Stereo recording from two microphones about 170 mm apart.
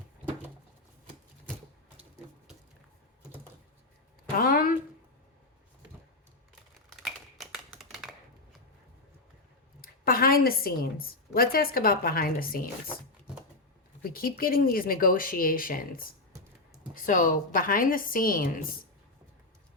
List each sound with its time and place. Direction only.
4.4 s a sound: 55° left (ahead or behind)
7.0 s tap: centre (ahead or behind)
9.8 s a woman's voice: 60° left (ahead or behind)
14.0 s speech: 60° left (ahead or behind)